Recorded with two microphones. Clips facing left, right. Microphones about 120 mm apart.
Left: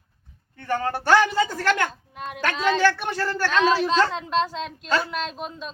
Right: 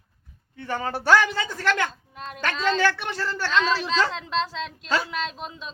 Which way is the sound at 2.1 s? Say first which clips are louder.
Left 3 dB; 55° left (ahead or behind).